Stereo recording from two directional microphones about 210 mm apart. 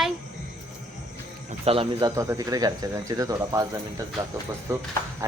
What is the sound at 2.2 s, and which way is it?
Speech, 15° right (ahead or behind).